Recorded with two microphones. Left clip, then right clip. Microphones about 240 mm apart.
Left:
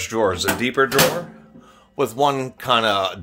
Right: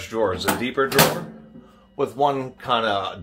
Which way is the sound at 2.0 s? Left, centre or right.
Left.